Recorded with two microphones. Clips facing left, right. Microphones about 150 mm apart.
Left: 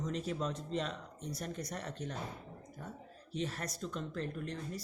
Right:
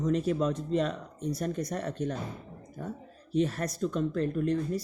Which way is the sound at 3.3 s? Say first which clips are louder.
Right 11 dB; 55° right (ahead or behind).